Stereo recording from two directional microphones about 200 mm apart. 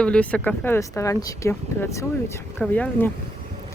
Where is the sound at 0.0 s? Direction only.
5° left (ahead or behind).